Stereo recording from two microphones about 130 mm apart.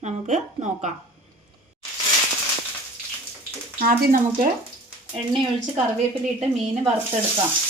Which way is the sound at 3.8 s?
90° right.